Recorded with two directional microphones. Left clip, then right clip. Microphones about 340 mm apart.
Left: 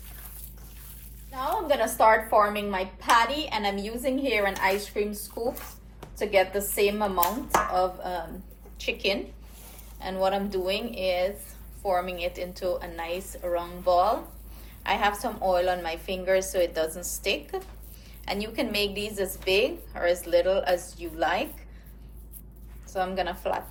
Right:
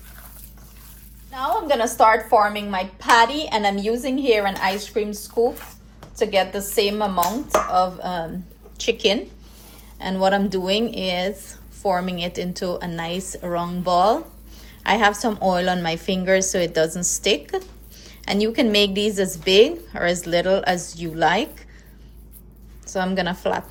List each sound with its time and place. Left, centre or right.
1.6 s a woman's voice: right
6.1 s a woman's voice: right
22.9 s a woman's voice: right